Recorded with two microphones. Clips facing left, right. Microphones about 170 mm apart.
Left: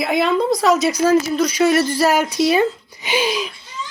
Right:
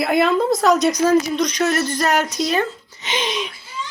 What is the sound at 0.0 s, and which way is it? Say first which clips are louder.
A woman's voice: right 1 dB; centre (ahead or behind).